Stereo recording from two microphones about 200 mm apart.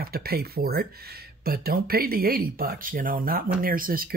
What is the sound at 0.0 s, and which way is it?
Speech, 50° right (ahead or behind).